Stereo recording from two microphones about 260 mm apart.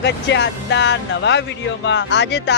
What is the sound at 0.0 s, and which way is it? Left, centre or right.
Speech, left.